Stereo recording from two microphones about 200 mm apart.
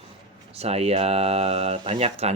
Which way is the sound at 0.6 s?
30° right (ahead or behind).